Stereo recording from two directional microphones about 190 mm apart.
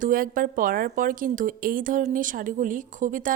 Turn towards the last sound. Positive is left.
turn(degrees=-45)  # may be behind; listen again after turning